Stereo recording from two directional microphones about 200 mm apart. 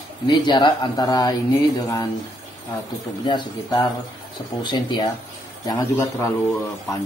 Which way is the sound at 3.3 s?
20° left (ahead or behind).